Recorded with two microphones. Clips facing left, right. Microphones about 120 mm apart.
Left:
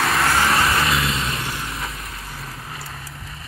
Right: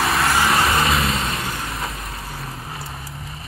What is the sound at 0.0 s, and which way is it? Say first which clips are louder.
Vehicle: even; centre (ahead or behind).